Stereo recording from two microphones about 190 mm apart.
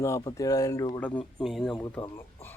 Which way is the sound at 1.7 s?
20° left (ahead or behind).